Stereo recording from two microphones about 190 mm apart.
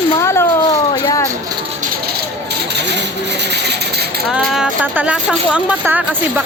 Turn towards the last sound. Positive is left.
turn(degrees=-10)  # may be behind; listen again after turning